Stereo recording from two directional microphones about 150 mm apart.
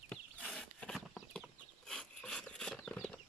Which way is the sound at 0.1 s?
5° left (ahead or behind).